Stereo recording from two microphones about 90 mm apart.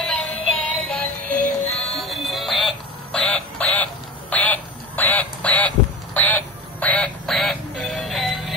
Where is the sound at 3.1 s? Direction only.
10° left (ahead or behind).